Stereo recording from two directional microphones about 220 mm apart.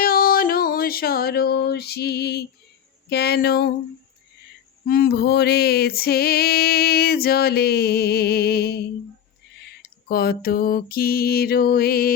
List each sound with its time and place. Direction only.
0.0 s a sound: 40° left (ahead or behind)
3.1 s music: 45° left (ahead or behind)
4.9 s music: 45° left (ahead or behind)
10.1 s music: 45° left (ahead or behind)